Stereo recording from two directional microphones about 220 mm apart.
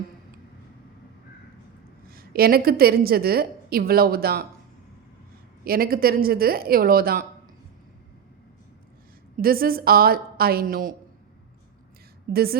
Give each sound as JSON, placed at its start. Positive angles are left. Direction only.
{"t": 2.0, "sound": "a woman's voice", "side_deg": -45}
{"t": 5.6, "sound": "a woman's voice", "side_deg": -40}
{"t": 9.4, "sound": "a woman's voice", "side_deg": -40}
{"t": 12.3, "sound": "a woman's voice", "side_deg": -45}